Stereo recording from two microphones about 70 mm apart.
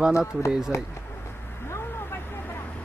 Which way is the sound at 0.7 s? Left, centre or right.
Left.